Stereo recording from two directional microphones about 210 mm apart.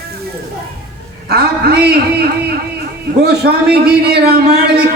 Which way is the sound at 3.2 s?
50° right (ahead or behind).